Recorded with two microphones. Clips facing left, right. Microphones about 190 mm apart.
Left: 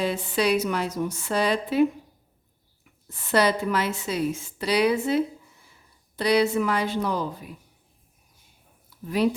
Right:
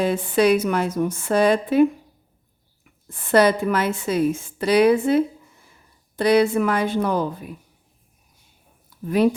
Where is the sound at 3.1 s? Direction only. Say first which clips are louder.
Right 5 dB; 50° right (ahead or behind).